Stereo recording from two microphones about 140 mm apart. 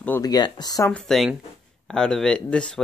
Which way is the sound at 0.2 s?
30° left (ahead or behind).